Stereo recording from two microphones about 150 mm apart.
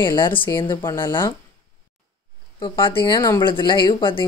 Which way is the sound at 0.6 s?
30° left (ahead or behind).